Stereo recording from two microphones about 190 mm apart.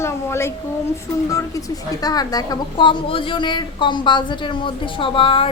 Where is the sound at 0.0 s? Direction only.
15° left (ahead or behind).